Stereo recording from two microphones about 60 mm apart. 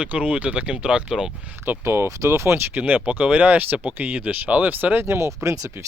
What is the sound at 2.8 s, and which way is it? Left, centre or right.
Speech, right.